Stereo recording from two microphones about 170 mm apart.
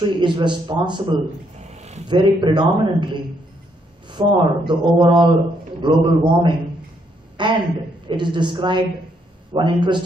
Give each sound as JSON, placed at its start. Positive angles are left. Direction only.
{"t": 0.2, "sound": "speech", "side_deg": -25}
{"t": 1.6, "sound": "a sound", "side_deg": -40}
{"t": 2.0, "sound": "speech", "side_deg": -30}
{"t": 4.1, "sound": "speech", "side_deg": -25}